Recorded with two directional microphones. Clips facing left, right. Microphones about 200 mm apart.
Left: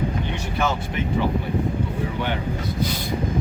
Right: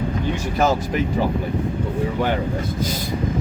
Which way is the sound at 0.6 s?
40° right (ahead or behind).